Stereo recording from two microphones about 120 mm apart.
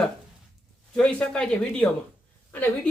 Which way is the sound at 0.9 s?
10° left (ahead or behind).